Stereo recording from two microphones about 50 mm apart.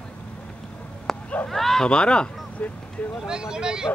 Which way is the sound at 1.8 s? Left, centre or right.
Centre.